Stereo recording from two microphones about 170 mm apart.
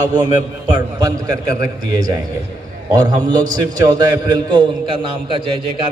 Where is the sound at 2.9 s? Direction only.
25° right (ahead or behind).